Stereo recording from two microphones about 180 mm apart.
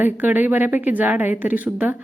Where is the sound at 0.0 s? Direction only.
10° right (ahead or behind).